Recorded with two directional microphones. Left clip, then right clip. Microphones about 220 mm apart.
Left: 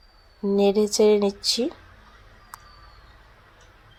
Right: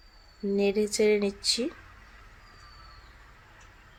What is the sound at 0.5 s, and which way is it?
Speech, 15° left (ahead or behind).